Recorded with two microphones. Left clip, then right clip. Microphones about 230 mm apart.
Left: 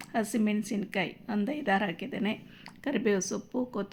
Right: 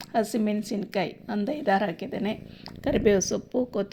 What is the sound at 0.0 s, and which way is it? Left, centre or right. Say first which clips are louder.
Speech: right 5 dB; centre.